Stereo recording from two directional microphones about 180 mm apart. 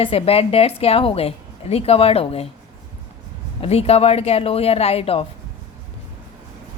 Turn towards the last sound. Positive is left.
turn(degrees=35)  # may be behind; listen again after turning